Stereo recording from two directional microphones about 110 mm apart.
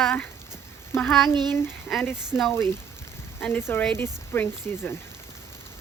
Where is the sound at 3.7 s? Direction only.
20° left (ahead or behind).